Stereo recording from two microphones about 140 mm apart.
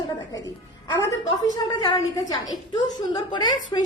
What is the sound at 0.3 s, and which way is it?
A woman's voice, 25° left (ahead or behind).